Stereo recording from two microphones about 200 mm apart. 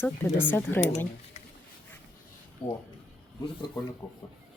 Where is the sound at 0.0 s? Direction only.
10° left (ahead or behind).